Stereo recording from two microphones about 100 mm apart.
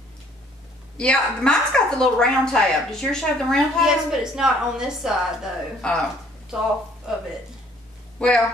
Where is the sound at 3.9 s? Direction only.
5° right (ahead or behind).